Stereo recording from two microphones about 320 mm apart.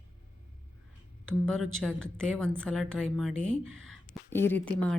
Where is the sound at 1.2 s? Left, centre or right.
Centre.